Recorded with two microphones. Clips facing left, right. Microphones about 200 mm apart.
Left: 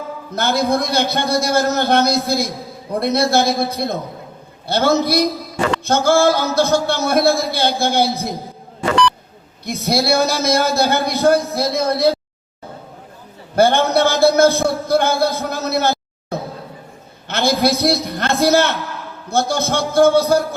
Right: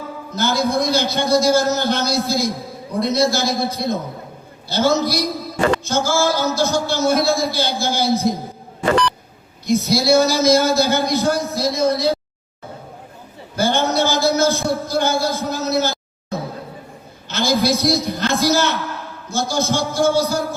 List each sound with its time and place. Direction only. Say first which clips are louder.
0.3 s speech: left 1 dB; 60° left (ahead or behind)
9.6 s speech: right 2 dB; 60° left (ahead or behind)
13.6 s speech: left 4 dB; 60° left (ahead or behind)
17.2 s speech: left 1 dB; 60° left (ahead or behind)